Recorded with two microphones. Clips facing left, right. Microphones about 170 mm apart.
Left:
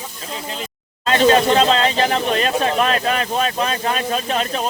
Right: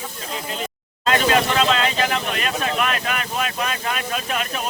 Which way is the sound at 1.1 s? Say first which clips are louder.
Left 6 dB; 30° left (ahead or behind).